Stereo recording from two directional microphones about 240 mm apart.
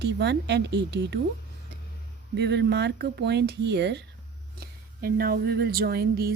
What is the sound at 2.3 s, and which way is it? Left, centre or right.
A woman's voice, right.